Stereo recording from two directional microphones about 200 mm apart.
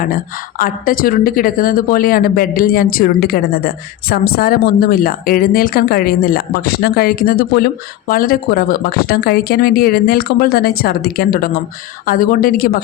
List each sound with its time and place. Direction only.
0.6 s speech: 45° left (ahead or behind)